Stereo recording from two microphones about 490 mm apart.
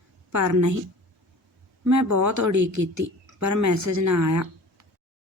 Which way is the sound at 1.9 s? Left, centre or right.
Right.